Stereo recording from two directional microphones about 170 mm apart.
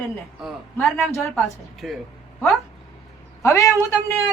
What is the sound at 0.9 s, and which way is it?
A woman's voice, centre (ahead or behind).